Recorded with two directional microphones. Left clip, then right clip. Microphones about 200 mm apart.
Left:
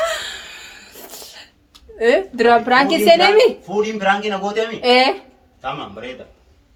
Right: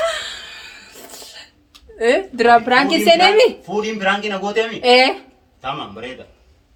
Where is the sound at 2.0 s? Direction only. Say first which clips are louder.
Left 1 dB; 10° left (ahead or behind).